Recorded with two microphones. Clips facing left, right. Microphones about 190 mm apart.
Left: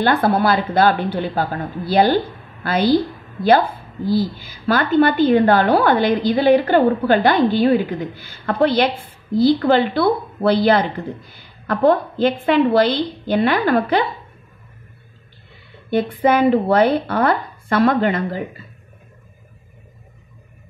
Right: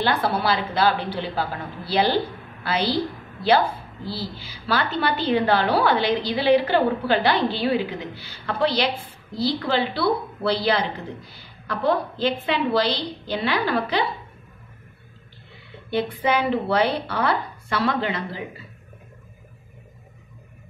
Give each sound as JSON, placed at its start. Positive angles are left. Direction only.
{"t": 0.0, "sound": "a woman's voice", "side_deg": 50}
{"t": 4.0, "sound": "a woman's voice", "side_deg": 45}
{"t": 15.9, "sound": "a woman's voice", "side_deg": 50}